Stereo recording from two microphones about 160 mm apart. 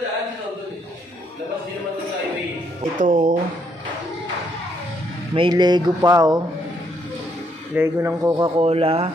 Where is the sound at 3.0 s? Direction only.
50° right (ahead or behind).